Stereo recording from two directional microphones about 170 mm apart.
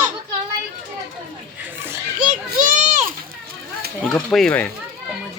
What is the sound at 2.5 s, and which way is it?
Children playing, 50° right (ahead or behind).